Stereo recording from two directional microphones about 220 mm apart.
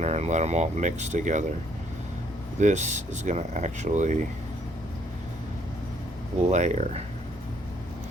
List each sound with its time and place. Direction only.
0.0 s speech: 30° right (ahead or behind)
2.6 s speech: 30° right (ahead or behind)
6.5 s speech: 30° right (ahead or behind)